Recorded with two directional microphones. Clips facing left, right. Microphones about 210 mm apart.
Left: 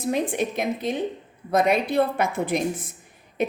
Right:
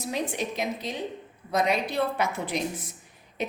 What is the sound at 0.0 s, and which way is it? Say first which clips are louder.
A woman's voice: left 6 dB; 55° left (ahead or behind).